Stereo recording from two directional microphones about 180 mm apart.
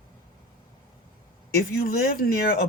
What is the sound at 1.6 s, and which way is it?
Speech, 55° left (ahead or behind).